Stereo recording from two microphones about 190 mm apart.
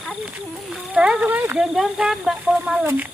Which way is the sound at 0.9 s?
5° right (ahead or behind).